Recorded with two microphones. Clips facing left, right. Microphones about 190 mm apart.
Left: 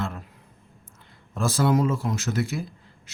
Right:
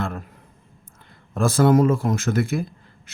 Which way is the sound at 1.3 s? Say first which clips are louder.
Right 5 dB; 55° right (ahead or behind).